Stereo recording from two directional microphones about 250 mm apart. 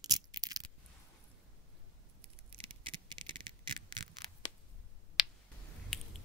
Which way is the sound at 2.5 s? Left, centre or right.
Right.